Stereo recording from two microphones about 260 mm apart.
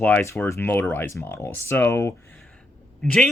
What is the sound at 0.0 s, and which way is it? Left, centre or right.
Speech, centre.